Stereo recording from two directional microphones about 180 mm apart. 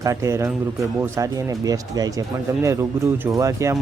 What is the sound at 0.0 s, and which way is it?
Speech, 15° right (ahead or behind).